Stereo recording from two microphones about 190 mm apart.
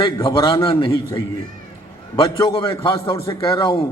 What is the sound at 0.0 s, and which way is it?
A man's voice, 25° left (ahead or behind).